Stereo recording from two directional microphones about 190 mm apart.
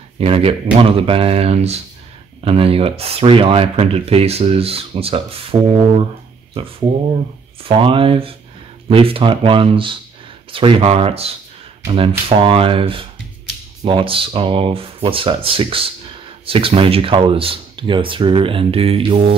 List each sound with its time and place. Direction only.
0.2 s speech: 30° right (ahead or behind)
7.6 s speech: 25° right (ahead or behind)